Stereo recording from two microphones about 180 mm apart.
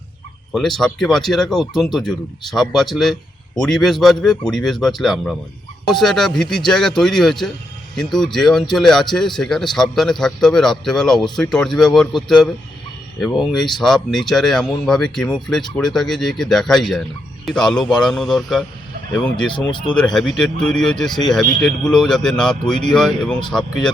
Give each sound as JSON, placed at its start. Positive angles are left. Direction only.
{"t": 0.5, "sound": "speech", "side_deg": 0}
{"t": 19.5, "sound": "speech", "side_deg": 25}
{"t": 20.1, "sound": "speech", "side_deg": 0}